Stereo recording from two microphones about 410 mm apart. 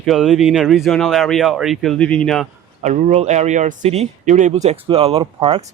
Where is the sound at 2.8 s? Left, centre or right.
Centre.